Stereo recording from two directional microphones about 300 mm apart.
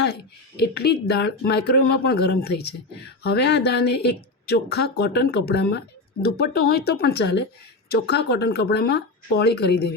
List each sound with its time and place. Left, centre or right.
0.6 s speech: left